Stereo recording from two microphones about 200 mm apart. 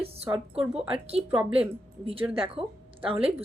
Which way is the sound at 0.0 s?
30° right (ahead or behind).